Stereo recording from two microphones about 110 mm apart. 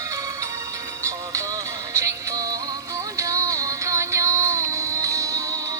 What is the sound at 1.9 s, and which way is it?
Music, 30° right (ahead or behind).